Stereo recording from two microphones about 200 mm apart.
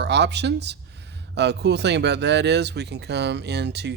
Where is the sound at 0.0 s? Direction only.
60° right (ahead or behind).